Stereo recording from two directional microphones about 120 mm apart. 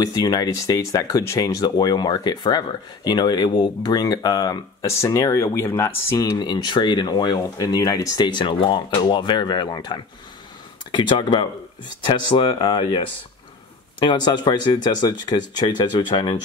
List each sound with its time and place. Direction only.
0.0 s speech: 30° left (ahead or behind)
6.3 s speech: 35° left (ahead or behind)